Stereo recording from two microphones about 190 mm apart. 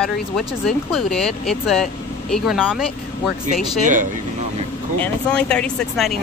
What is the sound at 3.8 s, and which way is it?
Speech, 40° right (ahead or behind).